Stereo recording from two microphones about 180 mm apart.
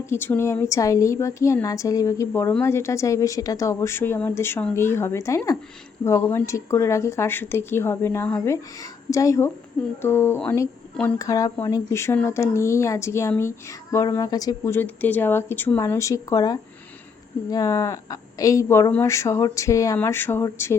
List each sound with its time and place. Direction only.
0.0 s a woman's voice: 15° left (ahead or behind)